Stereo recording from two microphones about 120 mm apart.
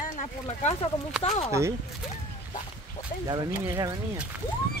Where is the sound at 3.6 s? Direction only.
25° right (ahead or behind).